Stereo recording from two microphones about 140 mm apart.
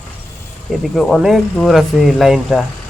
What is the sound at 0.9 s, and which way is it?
Speech, centre (ahead or behind).